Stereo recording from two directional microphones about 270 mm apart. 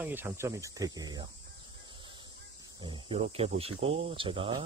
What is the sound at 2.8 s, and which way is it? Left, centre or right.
Speech, centre.